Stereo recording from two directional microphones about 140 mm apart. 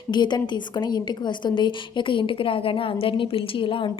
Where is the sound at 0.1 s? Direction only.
30° left (ahead or behind).